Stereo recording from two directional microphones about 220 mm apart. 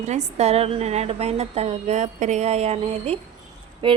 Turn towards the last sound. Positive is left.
turn(degrees=-20)  # may be behind; listen again after turning